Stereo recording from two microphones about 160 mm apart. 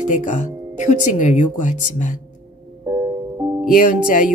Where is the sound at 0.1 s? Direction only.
50° left (ahead or behind).